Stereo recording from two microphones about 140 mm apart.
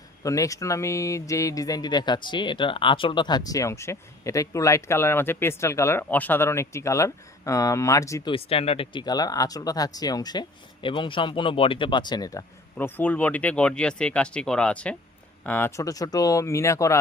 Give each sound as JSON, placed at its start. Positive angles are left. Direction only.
{"t": 0.2, "sound": "speech", "side_deg": 25}
{"t": 8.3, "sound": "speech", "side_deg": 45}
{"t": 12.7, "sound": "speech", "side_deg": 10}